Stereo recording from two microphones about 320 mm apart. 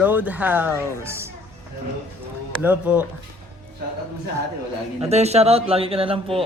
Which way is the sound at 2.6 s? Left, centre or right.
Centre.